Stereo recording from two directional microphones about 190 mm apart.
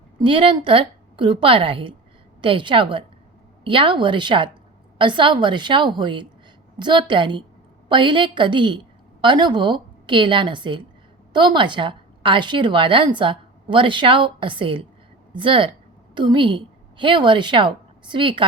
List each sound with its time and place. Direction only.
0.2 s a woman's voice: 25° right (ahead or behind)